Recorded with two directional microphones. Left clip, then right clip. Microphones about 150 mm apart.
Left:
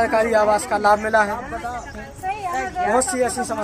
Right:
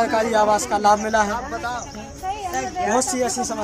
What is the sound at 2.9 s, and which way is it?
Speech, 5° left (ahead or behind).